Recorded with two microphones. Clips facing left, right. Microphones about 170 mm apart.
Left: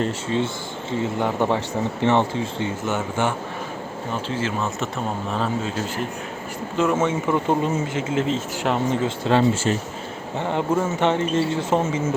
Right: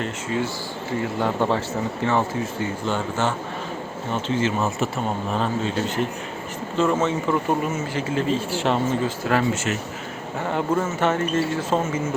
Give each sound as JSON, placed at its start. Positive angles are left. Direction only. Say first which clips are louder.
{"t": 0.0, "sound": "speech", "louder": "left 3 dB", "side_deg": 25}
{"t": 4.3, "sound": "speech", "louder": "right 4 dB", "side_deg": 0}
{"t": 7.4, "sound": "speech", "louder": "left 2 dB", "side_deg": 20}
{"t": 9.0, "sound": "speech", "louder": "left 3 dB", "side_deg": 25}